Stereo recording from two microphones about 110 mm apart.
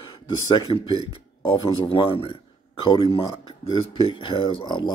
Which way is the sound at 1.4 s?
50° left (ahead or behind).